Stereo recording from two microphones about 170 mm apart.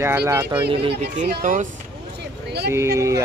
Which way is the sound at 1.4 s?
50° right (ahead or behind).